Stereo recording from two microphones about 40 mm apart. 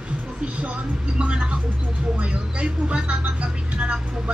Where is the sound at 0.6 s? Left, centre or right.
Right.